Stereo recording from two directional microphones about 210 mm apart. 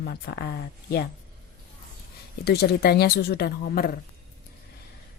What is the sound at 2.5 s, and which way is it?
Speech, 50° left (ahead or behind).